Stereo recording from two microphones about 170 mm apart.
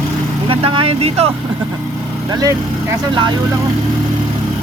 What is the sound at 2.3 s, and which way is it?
Speech, 20° right (ahead or behind).